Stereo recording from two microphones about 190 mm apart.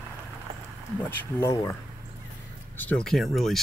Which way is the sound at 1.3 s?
20° left (ahead or behind).